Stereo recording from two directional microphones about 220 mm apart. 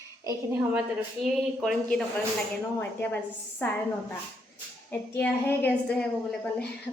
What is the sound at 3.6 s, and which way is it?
Speech, 10° left (ahead or behind).